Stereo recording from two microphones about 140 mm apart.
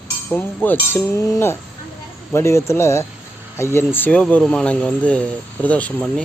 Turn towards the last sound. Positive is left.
turn(degrees=10)  # may be behind; listen again after turning